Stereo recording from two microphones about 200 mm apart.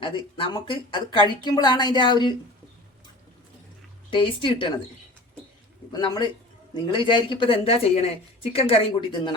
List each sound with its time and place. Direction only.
0.0 s speech: 25° left (ahead or behind)
4.1 s speech: 25° left (ahead or behind)
5.9 s speech: 20° left (ahead or behind)